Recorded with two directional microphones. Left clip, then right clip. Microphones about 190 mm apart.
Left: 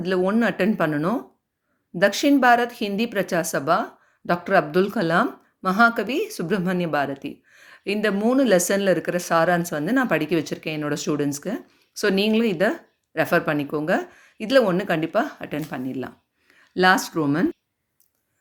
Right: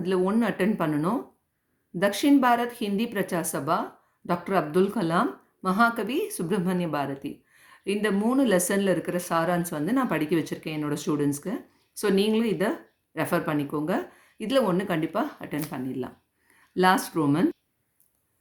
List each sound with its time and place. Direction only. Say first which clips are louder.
0.0 s a woman's voice: left 4 dB; 30° left (ahead or behind)